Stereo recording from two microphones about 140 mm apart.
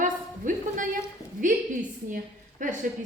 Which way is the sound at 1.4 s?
70° right (ahead or behind).